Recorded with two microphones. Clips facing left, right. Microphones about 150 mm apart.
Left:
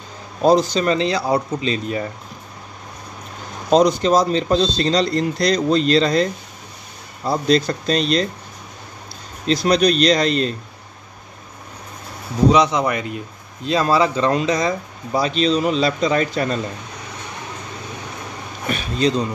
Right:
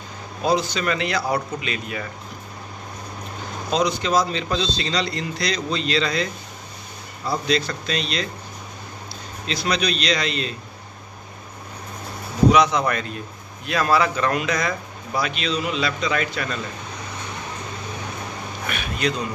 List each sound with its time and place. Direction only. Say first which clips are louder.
0.4 s a man's voice: left 7 dB; 40° left (ahead or behind)
3.7 s a man's voice: left 6 dB; 45° left (ahead or behind)
9.5 s speech: left 8 dB; 45° left (ahead or behind)
12.4 s speech: left 2 dB; 25° left (ahead or behind)
18.7 s speech: left 6 dB; 30° left (ahead or behind)